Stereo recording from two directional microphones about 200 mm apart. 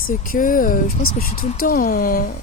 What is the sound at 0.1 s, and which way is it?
Speech, 45° left (ahead or behind).